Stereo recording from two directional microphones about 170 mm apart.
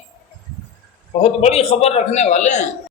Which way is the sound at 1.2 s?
35° left (ahead or behind).